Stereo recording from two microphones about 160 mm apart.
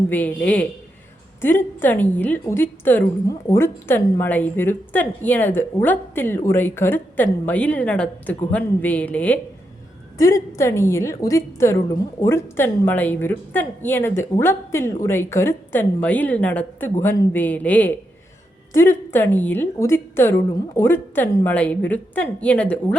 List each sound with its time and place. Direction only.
0.1 s a woman's voice: 10° left (ahead or behind)
10.2 s a woman's voice: 20° left (ahead or behind)